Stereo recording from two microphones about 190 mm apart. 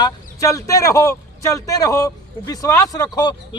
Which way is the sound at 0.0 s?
15° left (ahead or behind).